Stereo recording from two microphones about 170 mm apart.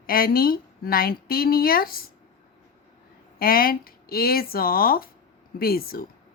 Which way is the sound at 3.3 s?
60° left (ahead or behind).